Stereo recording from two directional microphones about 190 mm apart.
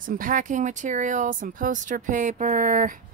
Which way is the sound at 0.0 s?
45° right (ahead or behind).